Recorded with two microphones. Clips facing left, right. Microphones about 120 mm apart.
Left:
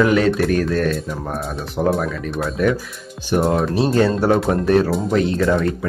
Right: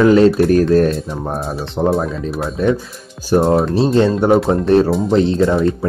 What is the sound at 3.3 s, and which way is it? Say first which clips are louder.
Speech: right 4 dB; 30° right (ahead or behind).